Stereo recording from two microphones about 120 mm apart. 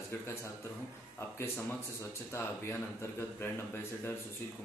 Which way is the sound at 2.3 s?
20° left (ahead or behind).